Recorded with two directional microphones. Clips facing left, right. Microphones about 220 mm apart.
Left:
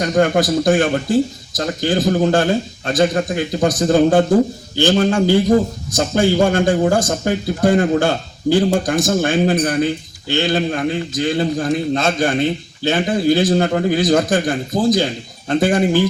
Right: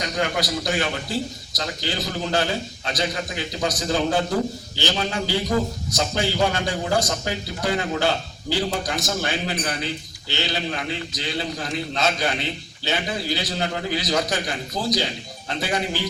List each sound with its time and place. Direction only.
0.0 s a man's voice: 50° left (ahead or behind)